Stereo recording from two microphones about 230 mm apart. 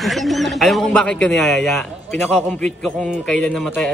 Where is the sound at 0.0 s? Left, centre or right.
Centre.